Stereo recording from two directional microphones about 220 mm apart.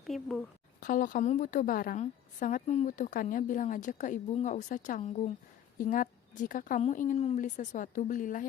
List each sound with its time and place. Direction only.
0.1 s speech: centre (ahead or behind)
0.8 s a woman's voice: 35° left (ahead or behind)